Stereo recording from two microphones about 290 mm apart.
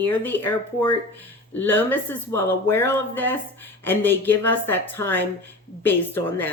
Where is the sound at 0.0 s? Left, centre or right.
Centre.